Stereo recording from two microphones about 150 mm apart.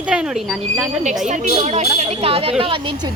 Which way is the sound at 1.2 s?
55° right (ahead or behind).